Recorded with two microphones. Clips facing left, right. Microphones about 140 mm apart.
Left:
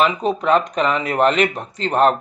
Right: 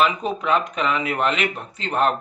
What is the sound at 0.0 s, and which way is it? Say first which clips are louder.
Speech: left 3 dB; 35° left (ahead or behind).